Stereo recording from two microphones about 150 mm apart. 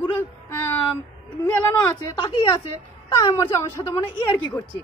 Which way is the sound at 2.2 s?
35° left (ahead or behind).